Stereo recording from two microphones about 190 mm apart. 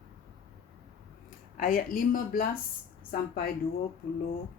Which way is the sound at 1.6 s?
45° left (ahead or behind).